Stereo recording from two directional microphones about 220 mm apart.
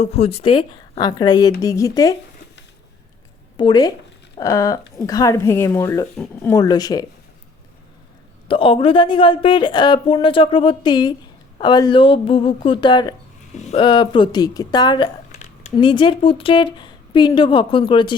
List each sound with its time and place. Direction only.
0.0 s speech: 30° left (ahead or behind)
3.6 s speech: 20° left (ahead or behind)
8.4 s speech: 25° left (ahead or behind)
13.5 s speech: 30° left (ahead or behind)